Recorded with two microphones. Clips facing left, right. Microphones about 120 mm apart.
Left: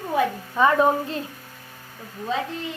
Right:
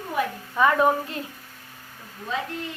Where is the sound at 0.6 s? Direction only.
25° left (ahead or behind).